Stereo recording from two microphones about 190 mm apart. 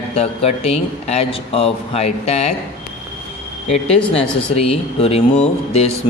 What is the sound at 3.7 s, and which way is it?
Speech, 30° left (ahead or behind).